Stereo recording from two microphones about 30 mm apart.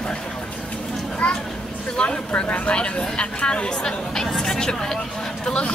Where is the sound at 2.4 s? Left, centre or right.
Left.